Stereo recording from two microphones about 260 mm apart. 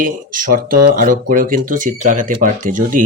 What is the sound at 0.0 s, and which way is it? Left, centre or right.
Speech, right.